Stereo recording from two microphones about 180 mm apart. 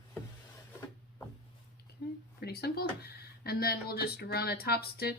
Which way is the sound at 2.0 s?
65° left (ahead or behind).